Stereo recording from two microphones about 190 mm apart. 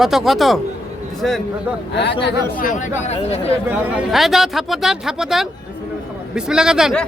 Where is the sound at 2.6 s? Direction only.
45° left (ahead or behind).